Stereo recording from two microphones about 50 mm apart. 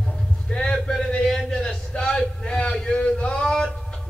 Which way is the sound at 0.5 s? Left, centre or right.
Centre.